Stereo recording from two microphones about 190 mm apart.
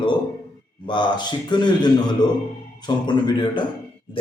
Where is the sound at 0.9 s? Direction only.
25° left (ahead or behind).